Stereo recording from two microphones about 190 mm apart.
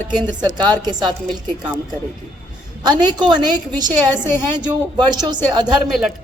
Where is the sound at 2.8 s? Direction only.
20° right (ahead or behind).